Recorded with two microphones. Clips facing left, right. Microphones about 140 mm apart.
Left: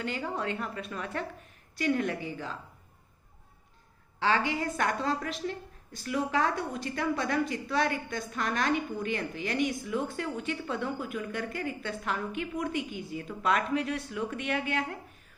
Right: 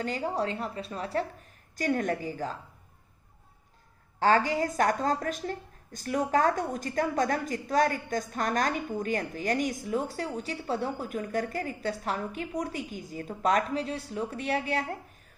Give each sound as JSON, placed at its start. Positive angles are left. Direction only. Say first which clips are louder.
{"t": 0.0, "sound": "a woman's voice", "louder": "right 3 dB", "side_deg": -35}
{"t": 4.2, "sound": "a woman's voice", "louder": "right 4 dB", "side_deg": -45}